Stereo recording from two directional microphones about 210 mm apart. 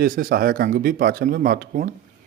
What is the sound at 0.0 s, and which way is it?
Speech, 40° right (ahead or behind).